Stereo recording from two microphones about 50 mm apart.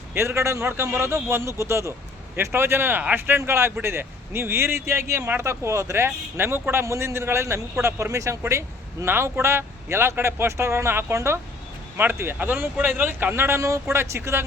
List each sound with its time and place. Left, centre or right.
0.2 s speech: right
2.5 s speech: right
6.1 s speech: right
9.3 s speech: right
11.9 s speech: right
13.6 s speech: right